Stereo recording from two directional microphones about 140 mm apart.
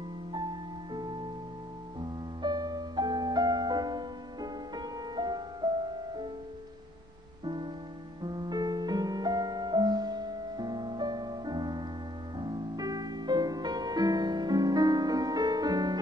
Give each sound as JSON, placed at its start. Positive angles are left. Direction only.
{"t": 0.9, "sound": "music", "side_deg": -30}
{"t": 7.4, "sound": "music", "side_deg": -35}